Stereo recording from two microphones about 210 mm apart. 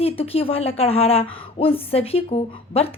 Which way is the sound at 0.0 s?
25° left (ahead or behind).